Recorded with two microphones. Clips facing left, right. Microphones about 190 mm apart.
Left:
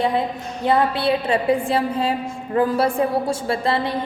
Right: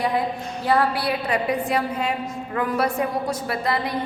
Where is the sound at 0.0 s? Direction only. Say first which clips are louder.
Left 2 dB; 25° left (ahead or behind).